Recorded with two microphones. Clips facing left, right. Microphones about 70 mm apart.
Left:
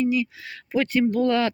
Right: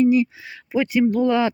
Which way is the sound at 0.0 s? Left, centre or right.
Right.